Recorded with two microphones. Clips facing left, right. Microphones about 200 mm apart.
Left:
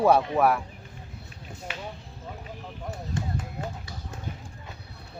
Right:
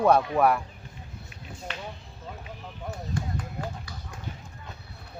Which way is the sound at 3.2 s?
25° left (ahead or behind).